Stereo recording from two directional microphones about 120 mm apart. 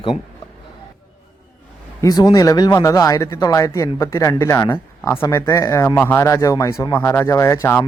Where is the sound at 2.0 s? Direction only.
30° left (ahead or behind).